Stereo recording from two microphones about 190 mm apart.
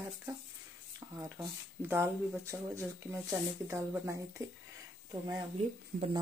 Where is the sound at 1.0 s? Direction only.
15° right (ahead or behind).